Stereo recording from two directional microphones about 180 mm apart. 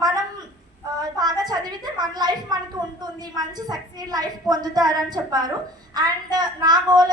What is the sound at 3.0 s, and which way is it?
A woman's voice, 25° right (ahead or behind).